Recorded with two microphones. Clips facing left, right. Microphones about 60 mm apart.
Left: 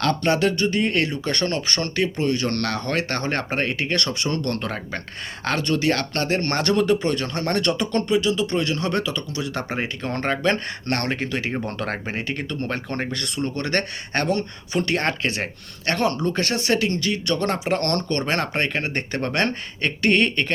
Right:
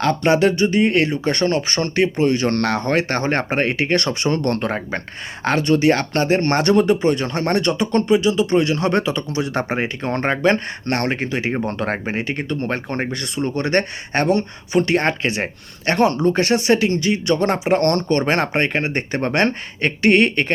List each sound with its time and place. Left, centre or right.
0.0 s speech: centre
10.5 s speech: centre